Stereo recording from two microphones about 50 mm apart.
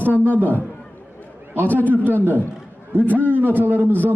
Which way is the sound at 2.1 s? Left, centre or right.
Right.